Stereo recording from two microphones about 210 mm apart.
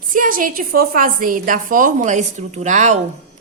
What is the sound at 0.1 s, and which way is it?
A woman's voice, 40° right (ahead or behind).